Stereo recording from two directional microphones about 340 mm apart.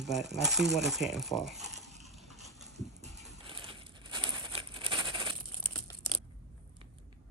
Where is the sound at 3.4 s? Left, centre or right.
Centre.